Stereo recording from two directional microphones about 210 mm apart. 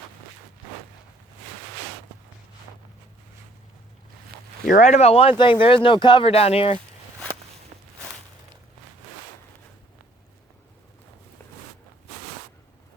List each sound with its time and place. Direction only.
4.6 s speech: 40° left (ahead or behind)